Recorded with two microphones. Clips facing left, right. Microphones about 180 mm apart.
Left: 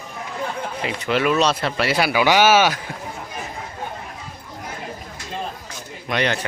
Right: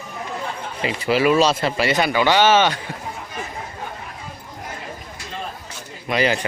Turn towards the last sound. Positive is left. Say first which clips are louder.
# right 2 dB
turn(degrees=-5)  # may be behind; listen again after turning